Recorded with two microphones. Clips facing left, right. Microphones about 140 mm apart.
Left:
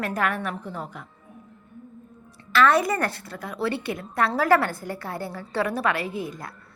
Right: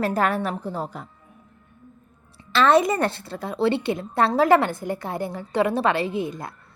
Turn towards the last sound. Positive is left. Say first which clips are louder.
# right 4 dB
turn(degrees=-20)  # may be behind; listen again after turning